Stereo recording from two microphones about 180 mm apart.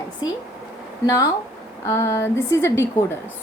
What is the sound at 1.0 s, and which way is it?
A woman's voice, 20° left (ahead or behind).